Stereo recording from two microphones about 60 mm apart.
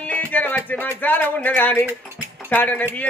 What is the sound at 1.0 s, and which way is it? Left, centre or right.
Speech, left.